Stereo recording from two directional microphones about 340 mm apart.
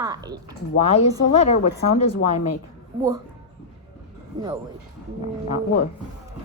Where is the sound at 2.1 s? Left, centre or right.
Left.